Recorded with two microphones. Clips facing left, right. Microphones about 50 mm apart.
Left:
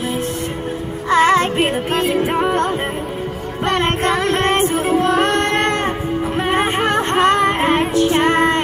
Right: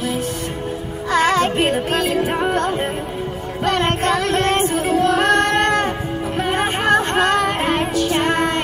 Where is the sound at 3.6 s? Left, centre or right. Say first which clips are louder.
Left 1 dB; left.